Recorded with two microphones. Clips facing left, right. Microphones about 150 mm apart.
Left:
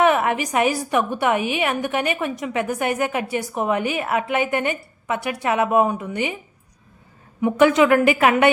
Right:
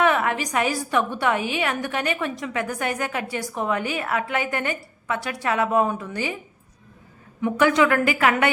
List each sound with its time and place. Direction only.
0.0 s a woman's voice: 20° left (ahead or behind)
7.4 s a woman's voice: 20° left (ahead or behind)